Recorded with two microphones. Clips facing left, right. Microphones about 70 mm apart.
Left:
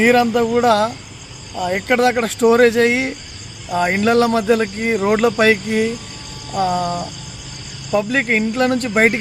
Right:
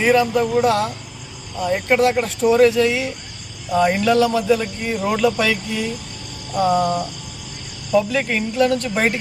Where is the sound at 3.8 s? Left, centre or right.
Left.